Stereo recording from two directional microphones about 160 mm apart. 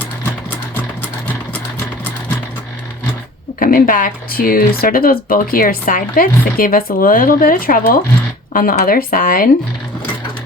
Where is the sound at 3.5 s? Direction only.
60° left (ahead or behind).